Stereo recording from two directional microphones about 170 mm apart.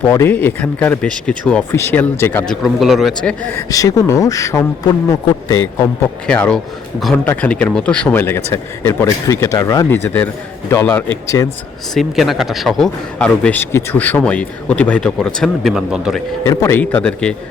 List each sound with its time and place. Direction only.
0.1 s speech: 15° left (ahead or behind)
2.5 s a man's voice: centre (ahead or behind)
3.7 s speech: 20° left (ahead or behind)
6.2 s speech: 5° left (ahead or behind)
11.9 s a man's voice: centre (ahead or behind)
16.4 s speech: 15° left (ahead or behind)